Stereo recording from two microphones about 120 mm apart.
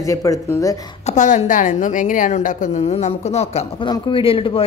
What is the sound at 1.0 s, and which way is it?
A woman's voice, 90° left.